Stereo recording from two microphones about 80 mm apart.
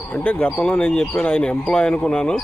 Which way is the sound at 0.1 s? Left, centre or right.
Left.